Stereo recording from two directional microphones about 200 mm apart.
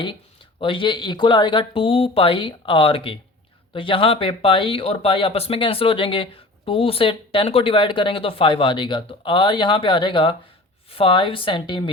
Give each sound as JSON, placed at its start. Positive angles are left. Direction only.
{"t": 0.6, "sound": "speech", "side_deg": 25}